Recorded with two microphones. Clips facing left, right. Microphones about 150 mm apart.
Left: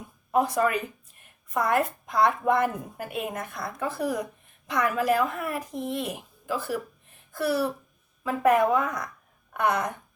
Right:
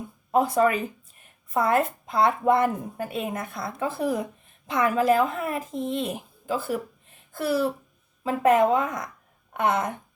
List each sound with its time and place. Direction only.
0.3 s a woman's voice: 25° right (ahead or behind)